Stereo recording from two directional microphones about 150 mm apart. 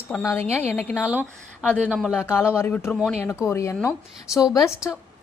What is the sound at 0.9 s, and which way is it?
Speech, 10° right (ahead or behind).